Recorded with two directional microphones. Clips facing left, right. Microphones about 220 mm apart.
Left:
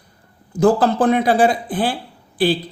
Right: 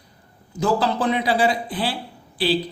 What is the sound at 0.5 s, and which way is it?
Speech, 50° left (ahead or behind).